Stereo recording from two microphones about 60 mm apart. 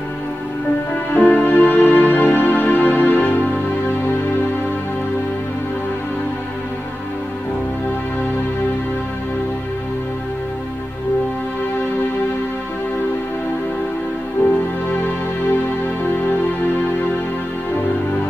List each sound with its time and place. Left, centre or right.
1.1 s music: left